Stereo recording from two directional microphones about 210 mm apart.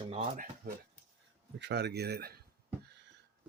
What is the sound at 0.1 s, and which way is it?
Speech, 40° right (ahead or behind).